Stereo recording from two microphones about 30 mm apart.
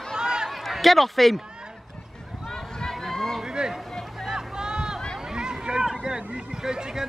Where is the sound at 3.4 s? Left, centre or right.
Right.